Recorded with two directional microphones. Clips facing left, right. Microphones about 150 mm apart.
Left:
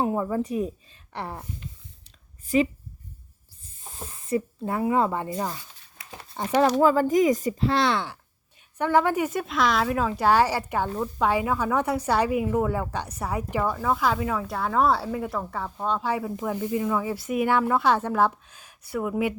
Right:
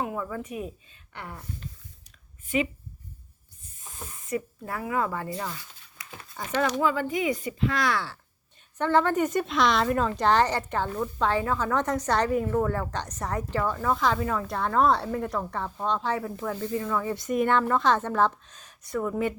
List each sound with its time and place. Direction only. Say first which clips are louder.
0.0 s speech: left 6 dB; 30° left (ahead or behind)
2.5 s speech: left 5 dB; 35° left (ahead or behind)
3.8 s speech: left 4 dB; 30° left (ahead or behind)
5.3 s speech: left 4 dB; 40° left (ahead or behind)
6.0 s a sound: left 6 dB; 30° left (ahead or behind)
6.6 s speech: left 6 dB; 35° left (ahead or behind); by 19.3 s 10° left (ahead or behind)